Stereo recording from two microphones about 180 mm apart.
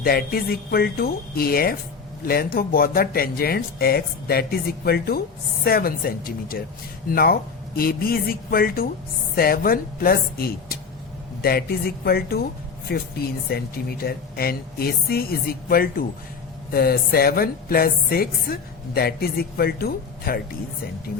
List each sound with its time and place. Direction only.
0.0 s speech: 55° left (ahead or behind)